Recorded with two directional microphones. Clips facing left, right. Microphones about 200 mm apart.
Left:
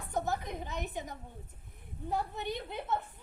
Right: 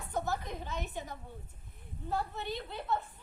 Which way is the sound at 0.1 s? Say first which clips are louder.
Left 1 dB; 15° left (ahead or behind).